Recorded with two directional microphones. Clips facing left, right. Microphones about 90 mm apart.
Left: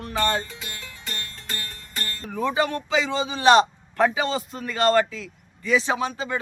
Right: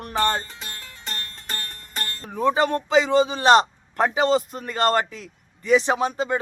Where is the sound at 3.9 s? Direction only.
30° right (ahead or behind).